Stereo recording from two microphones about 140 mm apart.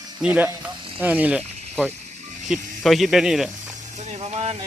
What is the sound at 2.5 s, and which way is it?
Speech, centre (ahead or behind).